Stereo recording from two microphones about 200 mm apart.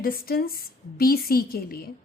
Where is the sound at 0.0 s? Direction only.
45° left (ahead or behind).